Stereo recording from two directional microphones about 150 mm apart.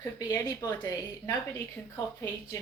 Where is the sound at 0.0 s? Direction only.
20° left (ahead or behind).